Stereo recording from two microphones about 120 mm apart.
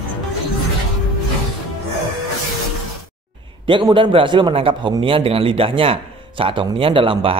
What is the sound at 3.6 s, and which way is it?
A man's voice, 45° right (ahead or behind).